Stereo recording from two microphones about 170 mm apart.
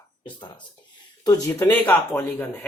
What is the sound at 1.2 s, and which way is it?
Speech, 20° left (ahead or behind).